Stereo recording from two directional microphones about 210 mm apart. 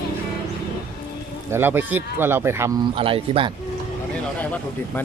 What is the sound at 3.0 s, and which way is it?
Speech, 25° right (ahead or behind).